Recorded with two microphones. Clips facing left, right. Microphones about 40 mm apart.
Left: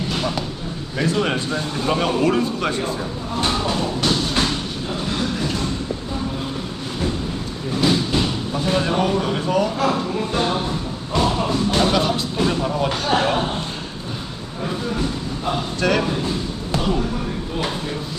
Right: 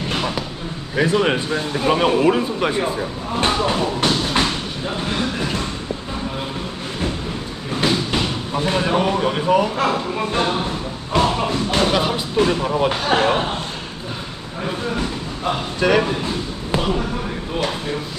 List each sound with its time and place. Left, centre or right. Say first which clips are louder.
0.2 s a sound: even; centre
0.9 s speech: right 3 dB; centre
7.9 s a sound: left 1 dB; right
9.7 s speech: even; right
15.8 s speech: right 3 dB; centre
16.7 s basketball bounce: right 1 dB; right